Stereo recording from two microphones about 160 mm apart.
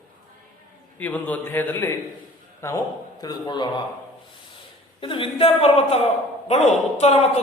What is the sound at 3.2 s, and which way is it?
Speech, 25° left (ahead or behind).